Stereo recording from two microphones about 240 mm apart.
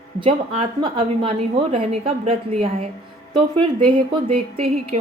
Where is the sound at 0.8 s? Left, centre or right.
Centre.